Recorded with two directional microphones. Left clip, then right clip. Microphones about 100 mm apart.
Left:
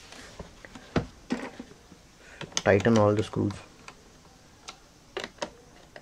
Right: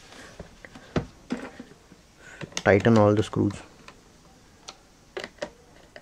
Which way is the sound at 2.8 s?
45° right (ahead or behind).